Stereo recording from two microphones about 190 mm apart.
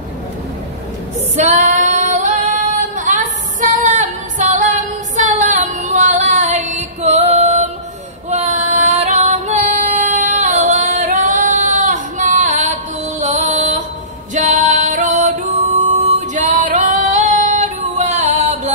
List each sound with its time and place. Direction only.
1.3 s female singing: 35° right (ahead or behind)
13.2 s music: 40° right (ahead or behind)
16.2 s female singing: 40° right (ahead or behind)